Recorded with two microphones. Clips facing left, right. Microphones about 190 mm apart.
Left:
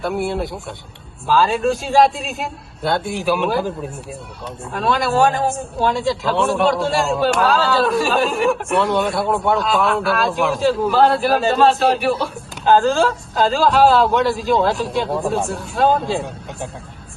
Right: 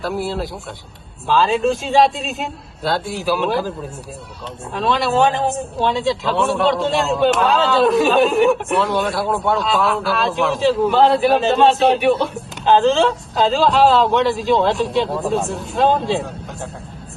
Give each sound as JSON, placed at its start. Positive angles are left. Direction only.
{"t": 0.3, "sound": "a man's voice", "side_deg": 0}
{"t": 3.0, "sound": "speech", "side_deg": 60}
{"t": 3.2, "sound": "a man's voice", "side_deg": 0}
{"t": 4.7, "sound": "a man's voice", "side_deg": 0}